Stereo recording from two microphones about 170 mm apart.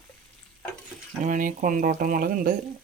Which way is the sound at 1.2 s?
50° right (ahead or behind).